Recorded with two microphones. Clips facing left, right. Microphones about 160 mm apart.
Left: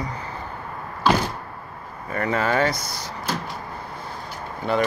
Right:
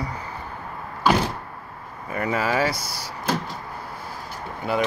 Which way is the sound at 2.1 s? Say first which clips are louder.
Left 1 dB; 10° right (ahead or behind).